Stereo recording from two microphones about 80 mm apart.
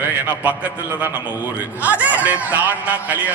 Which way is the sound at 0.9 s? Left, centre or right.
Right.